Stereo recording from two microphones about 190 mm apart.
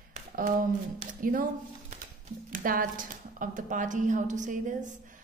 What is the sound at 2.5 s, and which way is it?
A woman's voice, 45° right (ahead or behind).